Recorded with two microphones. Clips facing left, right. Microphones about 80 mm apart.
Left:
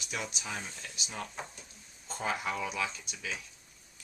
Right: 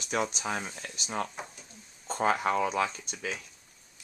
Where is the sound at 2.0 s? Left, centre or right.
Right.